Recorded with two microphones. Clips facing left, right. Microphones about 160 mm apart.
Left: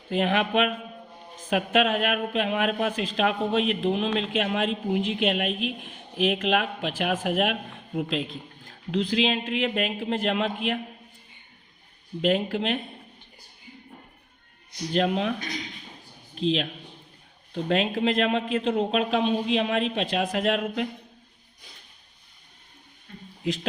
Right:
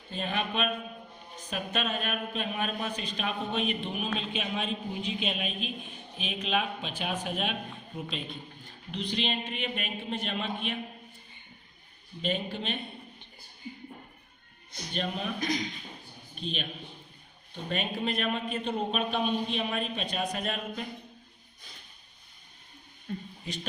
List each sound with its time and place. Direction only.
0.1 s speech: 90° left
7.9 s a man's voice: 90° left
12.2 s a man's voice: 90° left
14.9 s a man's voice: 90° left
16.4 s a man's voice: 90° left
23.4 s a man's voice: 90° left